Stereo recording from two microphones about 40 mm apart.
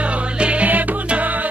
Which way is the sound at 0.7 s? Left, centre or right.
Right.